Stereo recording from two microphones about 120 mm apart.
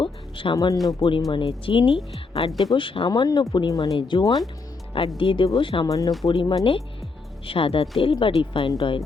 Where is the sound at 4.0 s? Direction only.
40° left (ahead or behind).